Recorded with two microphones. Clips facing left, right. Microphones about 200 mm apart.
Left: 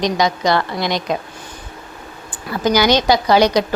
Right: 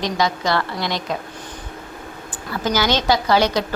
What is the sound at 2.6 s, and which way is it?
A woman's voice, 15° left (ahead or behind).